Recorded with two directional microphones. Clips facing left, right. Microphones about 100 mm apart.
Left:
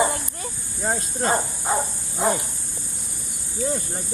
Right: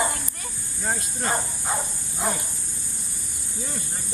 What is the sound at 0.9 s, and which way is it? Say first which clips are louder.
Speech: left 4 dB; 35° left (ahead or behind).